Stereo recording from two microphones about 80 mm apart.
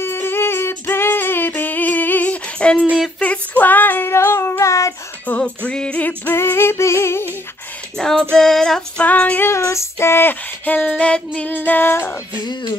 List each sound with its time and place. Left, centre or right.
0.0 s female singing: left
3.2 s child singing: centre; by 4.9 s left
5.3 s music: left
8.0 s child singing: centre
9.0 s female singing: centre
9.5 s female singing: left; by 11.5 s centre
11.5 s female singing: left
12.4 s speech: left